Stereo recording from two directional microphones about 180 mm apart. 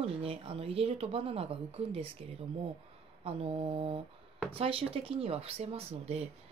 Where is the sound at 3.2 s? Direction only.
35° right (ahead or behind).